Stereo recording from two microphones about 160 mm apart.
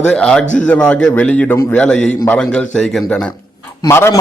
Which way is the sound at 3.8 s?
20° left (ahead or behind).